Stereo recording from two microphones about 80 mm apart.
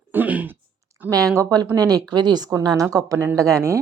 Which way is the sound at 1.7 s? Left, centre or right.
Right.